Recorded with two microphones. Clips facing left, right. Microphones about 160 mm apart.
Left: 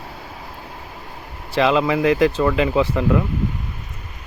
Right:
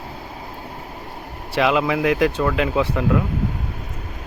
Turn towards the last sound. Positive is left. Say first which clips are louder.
# left 2 dB
turn(degrees=0)  # may be behind; listen again after turning